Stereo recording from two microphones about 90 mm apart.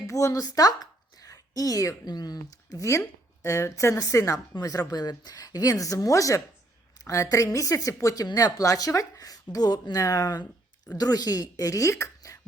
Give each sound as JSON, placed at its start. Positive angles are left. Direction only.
{"t": 0.1, "sound": "a woman's voice", "side_deg": 35}
{"t": 2.8, "sound": "speech", "side_deg": 35}